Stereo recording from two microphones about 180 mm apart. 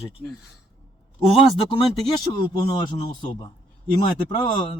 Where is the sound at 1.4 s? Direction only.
30° left (ahead or behind).